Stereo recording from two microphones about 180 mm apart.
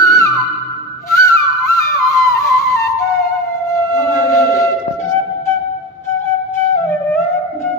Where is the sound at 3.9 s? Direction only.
15° left (ahead or behind).